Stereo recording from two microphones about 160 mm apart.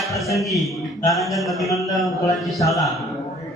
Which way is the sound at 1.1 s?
Centre (ahead or behind).